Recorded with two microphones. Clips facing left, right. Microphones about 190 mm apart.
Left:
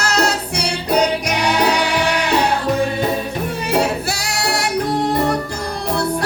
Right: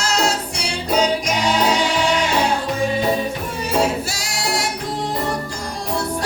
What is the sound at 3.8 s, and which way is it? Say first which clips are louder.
Music: even; 60° left (ahead or behind).